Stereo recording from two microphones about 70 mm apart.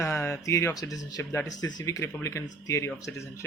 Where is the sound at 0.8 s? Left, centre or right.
Left.